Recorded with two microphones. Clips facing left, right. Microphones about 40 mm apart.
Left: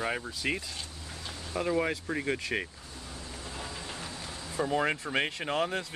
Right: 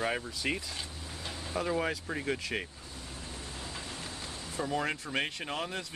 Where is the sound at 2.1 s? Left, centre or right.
Centre.